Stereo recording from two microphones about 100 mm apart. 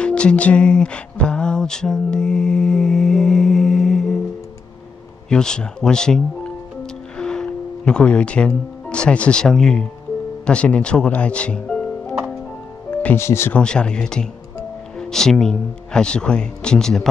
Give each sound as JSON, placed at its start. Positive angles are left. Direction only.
{"t": 0.0, "sound": "music", "side_deg": 10}
{"t": 5.3, "sound": "speech", "side_deg": 10}
{"t": 12.9, "sound": "music", "side_deg": 15}
{"t": 13.2, "sound": "speech", "side_deg": 25}
{"t": 13.5, "sound": "speech", "side_deg": 10}